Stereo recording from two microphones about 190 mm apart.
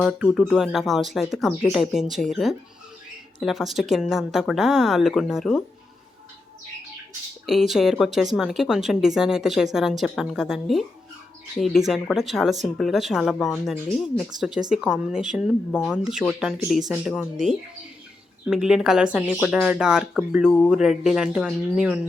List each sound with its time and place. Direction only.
0.0 s speech: centre (ahead or behind)
7.4 s speech: centre (ahead or behind)
18.4 s speech: 5° right (ahead or behind)